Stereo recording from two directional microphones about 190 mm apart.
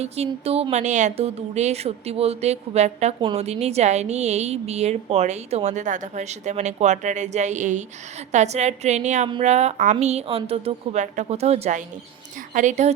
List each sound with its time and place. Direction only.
0.0 s a woman's voice: 30° right (ahead or behind)